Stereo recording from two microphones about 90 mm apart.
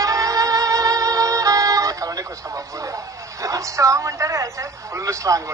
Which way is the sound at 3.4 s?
35° right (ahead or behind).